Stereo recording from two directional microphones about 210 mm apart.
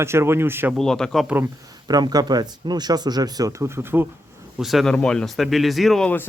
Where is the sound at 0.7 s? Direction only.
Centre (ahead or behind).